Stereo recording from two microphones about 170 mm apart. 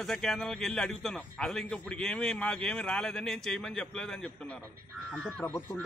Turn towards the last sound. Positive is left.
turn(degrees=10)  # may be behind; listen again after turning